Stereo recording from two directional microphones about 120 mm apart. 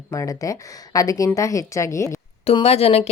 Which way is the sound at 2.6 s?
60° left (ahead or behind).